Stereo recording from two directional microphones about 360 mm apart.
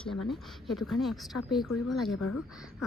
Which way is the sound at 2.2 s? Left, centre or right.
Left.